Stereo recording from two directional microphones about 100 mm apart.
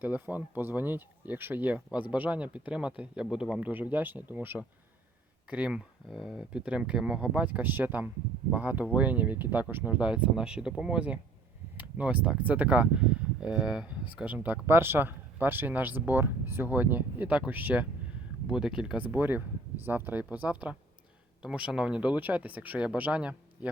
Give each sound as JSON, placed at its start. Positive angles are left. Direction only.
{"t": 0.0, "sound": "speech", "side_deg": -15}
{"t": 18.4, "sound": "speech", "side_deg": -5}
{"t": 18.9, "sound": "speech", "side_deg": -15}